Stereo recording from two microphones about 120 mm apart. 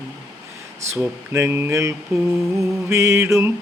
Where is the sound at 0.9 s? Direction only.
20° right (ahead or behind).